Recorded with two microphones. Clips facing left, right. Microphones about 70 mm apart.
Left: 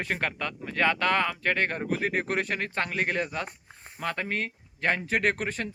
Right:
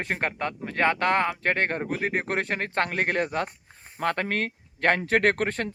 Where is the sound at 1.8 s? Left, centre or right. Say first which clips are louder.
Right 1 dB; right.